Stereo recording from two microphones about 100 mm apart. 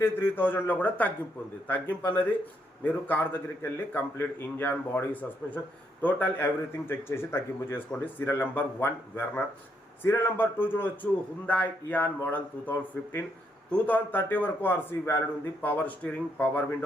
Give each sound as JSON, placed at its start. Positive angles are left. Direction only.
{"t": 0.0, "sound": "a man's voice", "side_deg": 20}